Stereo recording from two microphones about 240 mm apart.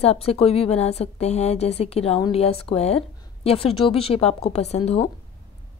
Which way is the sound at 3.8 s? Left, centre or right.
Left.